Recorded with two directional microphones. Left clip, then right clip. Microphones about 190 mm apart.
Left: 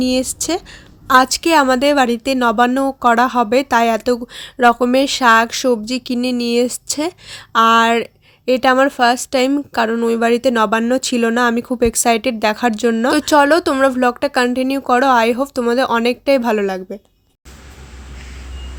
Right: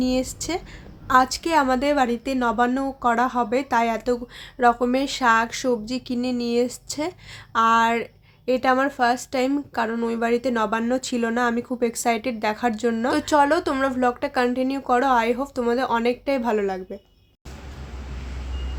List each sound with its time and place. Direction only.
0.0 s a woman's voice: 40° left (ahead or behind)